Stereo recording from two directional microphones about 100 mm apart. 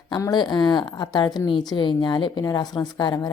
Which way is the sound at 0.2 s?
45° left (ahead or behind).